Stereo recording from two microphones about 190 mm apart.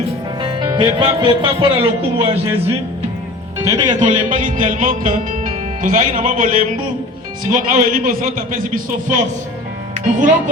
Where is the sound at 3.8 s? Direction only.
40° right (ahead or behind).